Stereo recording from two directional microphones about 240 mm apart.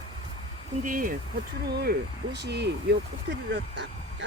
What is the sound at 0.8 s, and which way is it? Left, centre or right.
Speech, right.